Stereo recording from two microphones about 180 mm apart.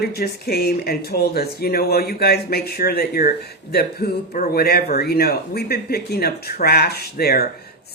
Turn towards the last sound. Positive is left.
turn(degrees=60)  # may be behind; listen again after turning